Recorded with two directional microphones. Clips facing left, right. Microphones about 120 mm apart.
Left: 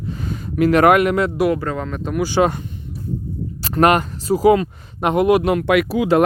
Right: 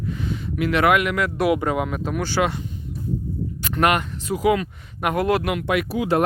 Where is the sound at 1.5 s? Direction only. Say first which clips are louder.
Right 1 dB; 10° right (ahead or behind).